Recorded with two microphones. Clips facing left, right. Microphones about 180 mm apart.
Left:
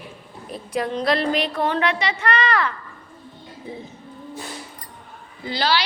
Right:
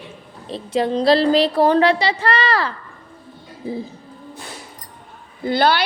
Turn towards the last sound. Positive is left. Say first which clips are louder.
# right 6 dB
turn(degrees=-55)  # may be behind; listen again after turning